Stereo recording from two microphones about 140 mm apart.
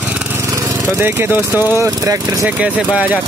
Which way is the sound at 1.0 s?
15° right (ahead or behind).